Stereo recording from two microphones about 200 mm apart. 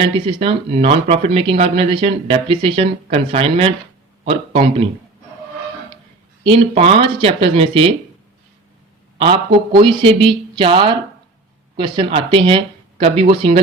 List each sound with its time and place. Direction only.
0.0 s speech: 30° right (ahead or behind)
6.4 s speech: 25° right (ahead or behind)
9.1 s a man's voice: 25° right (ahead or behind)